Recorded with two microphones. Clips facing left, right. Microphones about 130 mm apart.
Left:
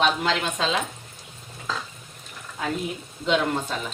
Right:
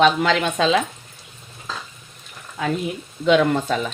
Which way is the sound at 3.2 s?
70° right (ahead or behind).